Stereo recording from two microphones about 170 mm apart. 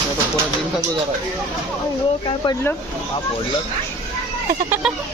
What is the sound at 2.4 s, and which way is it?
Speech, 25° left (ahead or behind).